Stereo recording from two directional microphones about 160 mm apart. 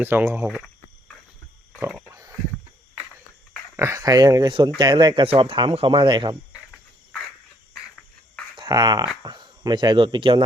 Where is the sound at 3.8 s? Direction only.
20° right (ahead or behind).